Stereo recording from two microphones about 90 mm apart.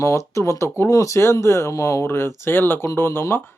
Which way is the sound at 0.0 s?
35° left (ahead or behind).